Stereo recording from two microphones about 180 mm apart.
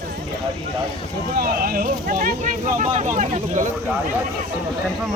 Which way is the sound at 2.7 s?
40° right (ahead or behind).